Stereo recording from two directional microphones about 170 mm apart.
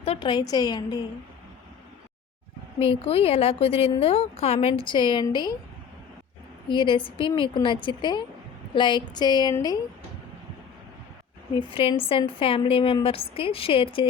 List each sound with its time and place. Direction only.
0.0 s a woman's voice: 35° left (ahead or behind)
2.7 s a woman's voice: 35° left (ahead or behind)
6.7 s a woman's voice: 30° left (ahead or behind)
11.7 s a woman's voice: 30° left (ahead or behind)